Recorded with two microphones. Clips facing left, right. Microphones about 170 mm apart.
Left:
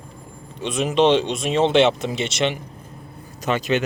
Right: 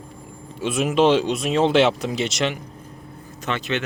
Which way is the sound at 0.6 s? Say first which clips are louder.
Even; 5° right (ahead or behind).